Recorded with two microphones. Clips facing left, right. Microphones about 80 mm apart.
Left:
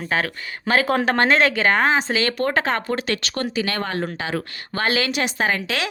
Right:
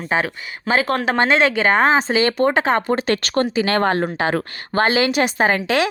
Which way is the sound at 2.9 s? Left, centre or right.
Right.